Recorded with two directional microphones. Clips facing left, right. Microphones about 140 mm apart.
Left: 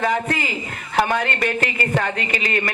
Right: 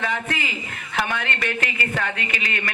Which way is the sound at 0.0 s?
40° left (ahead or behind).